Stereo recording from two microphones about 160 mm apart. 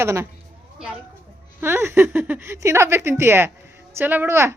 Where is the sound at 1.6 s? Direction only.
15° right (ahead or behind).